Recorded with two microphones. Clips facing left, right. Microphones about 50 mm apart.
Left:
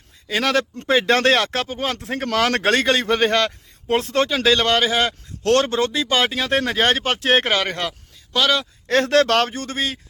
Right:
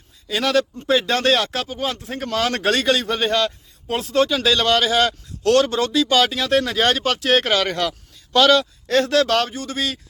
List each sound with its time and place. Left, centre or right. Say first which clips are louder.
0.3 s speech: right 1 dB; left
5.4 s speech: right 1 dB; left
8.3 s a man's voice: right 5 dB; centre
8.9 s speech: left 1 dB; left
9.7 s a man's voice: right 1 dB; left